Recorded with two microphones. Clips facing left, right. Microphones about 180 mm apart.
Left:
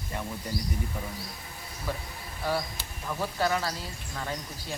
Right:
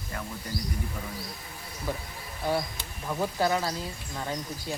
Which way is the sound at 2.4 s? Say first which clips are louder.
Right 2 dB; 15° right (ahead or behind).